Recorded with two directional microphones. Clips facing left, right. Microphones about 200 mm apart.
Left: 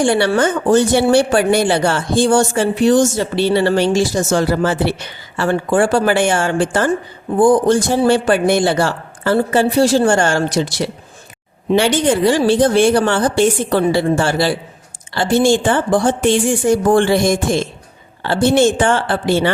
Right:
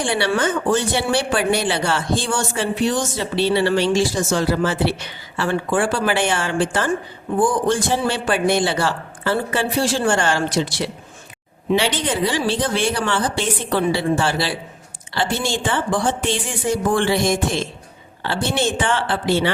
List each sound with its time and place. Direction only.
0.0 s speech: 45° left (ahead or behind)
7.3 s speech: 35° left (ahead or behind)